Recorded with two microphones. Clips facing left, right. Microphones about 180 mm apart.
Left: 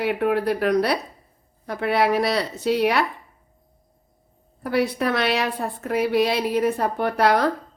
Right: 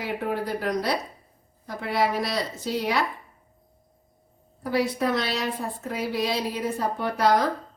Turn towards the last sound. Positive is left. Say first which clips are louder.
# left 3 dB
turn(degrees=65)  # may be behind; listen again after turning